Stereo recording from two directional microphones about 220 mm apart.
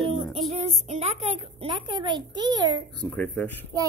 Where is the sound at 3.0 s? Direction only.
5° left (ahead or behind).